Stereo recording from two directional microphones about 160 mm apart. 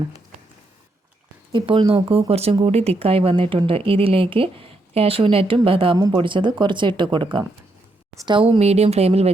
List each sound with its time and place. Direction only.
1.5 s speech: 30° right (ahead or behind)